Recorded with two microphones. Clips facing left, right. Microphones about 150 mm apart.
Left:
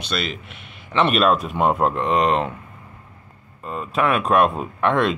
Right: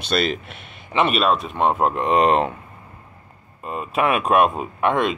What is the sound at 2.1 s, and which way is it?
Speech, 45° right (ahead or behind).